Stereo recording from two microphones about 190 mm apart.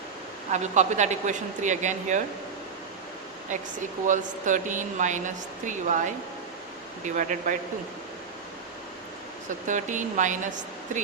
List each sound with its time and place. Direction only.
0.5 s speech: 40° right (ahead or behind)
3.5 s a man's voice: 40° right (ahead or behind)
9.6 s speech: 40° right (ahead or behind)